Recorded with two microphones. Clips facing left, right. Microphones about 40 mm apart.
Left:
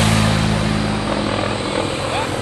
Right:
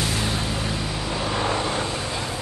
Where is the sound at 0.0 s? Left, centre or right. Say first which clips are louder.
Left 8 dB; left.